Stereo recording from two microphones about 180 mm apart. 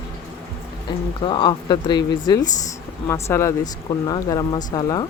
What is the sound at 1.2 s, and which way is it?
Speech, 25° left (ahead or behind).